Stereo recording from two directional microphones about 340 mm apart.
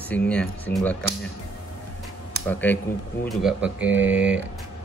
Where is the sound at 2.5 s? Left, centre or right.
Centre.